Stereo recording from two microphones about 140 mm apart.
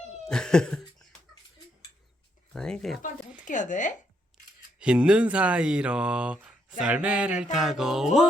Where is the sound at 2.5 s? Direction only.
5° left (ahead or behind).